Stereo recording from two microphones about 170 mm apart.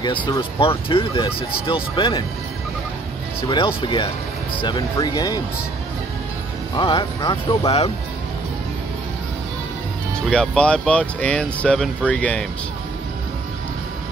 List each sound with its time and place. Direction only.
0.0 s speech: 25° left (ahead or behind)
3.4 s speech: 30° left (ahead or behind)
6.8 s speech: 30° left (ahead or behind)
10.2 s speech: centre (ahead or behind)